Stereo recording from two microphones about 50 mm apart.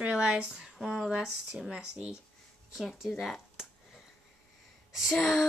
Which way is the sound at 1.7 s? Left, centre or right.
Right.